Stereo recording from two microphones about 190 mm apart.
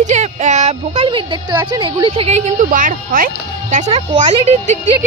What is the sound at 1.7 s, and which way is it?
Speech, 25° right (ahead or behind).